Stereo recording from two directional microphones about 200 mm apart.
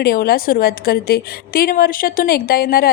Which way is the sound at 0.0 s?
50° left (ahead or behind).